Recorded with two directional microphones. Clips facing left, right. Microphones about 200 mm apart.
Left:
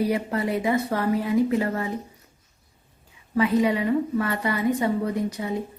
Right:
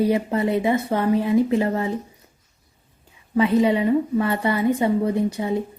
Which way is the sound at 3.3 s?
25° right (ahead or behind).